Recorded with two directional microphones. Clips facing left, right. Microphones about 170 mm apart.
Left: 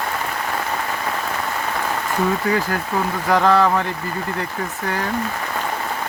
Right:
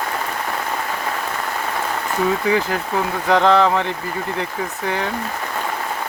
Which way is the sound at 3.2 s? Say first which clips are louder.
Right 1 dB; 20° right (ahead or behind).